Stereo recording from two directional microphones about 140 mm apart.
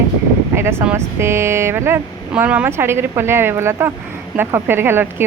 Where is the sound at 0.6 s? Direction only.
15° right (ahead or behind).